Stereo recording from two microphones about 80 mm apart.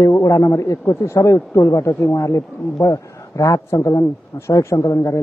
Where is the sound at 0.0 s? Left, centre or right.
Left.